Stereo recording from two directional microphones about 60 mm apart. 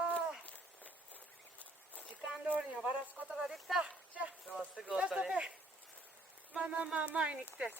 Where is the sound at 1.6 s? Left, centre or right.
Left.